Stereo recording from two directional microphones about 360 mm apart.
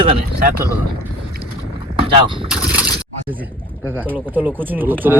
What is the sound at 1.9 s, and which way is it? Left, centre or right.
Vehicle, centre.